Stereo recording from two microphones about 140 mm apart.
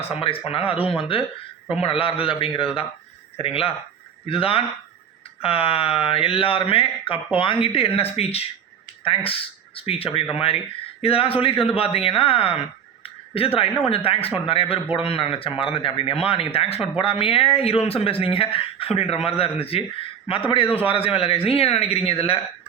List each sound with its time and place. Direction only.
0.0 s speech: 45° left (ahead or behind)